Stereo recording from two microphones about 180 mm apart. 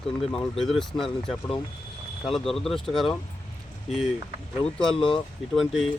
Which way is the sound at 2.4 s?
Centre (ahead or behind).